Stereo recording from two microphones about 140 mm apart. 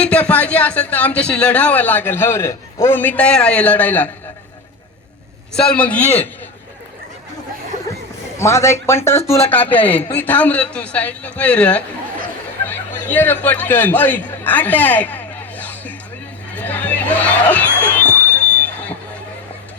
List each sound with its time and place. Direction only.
0.0 s a man's voice: 10° left (ahead or behind)
5.5 s a man's voice: 10° left (ahead or behind)
8.4 s a man's voice: 20° left (ahead or behind)
17.7 s speech: 15° right (ahead or behind)
17.9 s a sound: 10° left (ahead or behind)